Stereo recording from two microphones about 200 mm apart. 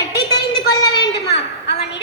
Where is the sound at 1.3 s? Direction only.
30° left (ahead or behind).